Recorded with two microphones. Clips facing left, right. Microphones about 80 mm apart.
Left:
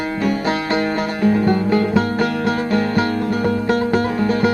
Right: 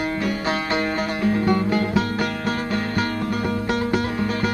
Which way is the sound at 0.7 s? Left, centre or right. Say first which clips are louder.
Left 4 dB; left.